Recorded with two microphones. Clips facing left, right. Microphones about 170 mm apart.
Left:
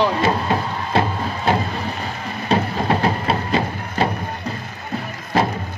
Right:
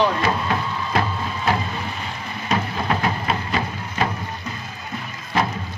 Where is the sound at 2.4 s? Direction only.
35° left (ahead or behind).